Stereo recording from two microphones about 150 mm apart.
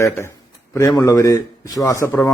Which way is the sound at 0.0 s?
15° left (ahead or behind).